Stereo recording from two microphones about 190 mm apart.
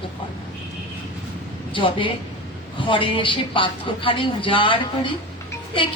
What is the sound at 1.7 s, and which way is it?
Speech, 25° left (ahead or behind).